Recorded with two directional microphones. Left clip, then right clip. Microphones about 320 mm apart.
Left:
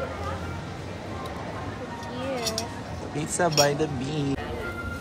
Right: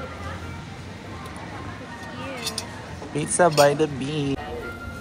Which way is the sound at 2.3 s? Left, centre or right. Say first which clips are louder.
Left 2 dB; left.